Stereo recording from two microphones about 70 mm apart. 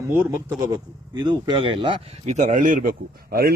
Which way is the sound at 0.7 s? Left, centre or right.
Right.